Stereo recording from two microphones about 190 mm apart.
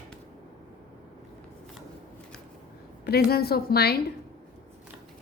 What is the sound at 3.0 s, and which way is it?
Speech, 55° left (ahead or behind).